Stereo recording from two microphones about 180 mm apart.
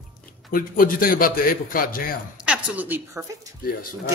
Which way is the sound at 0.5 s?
50° left (ahead or behind).